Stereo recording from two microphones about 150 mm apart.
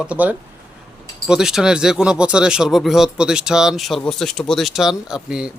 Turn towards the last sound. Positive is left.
turn(degrees=-5)  # may be behind; listen again after turning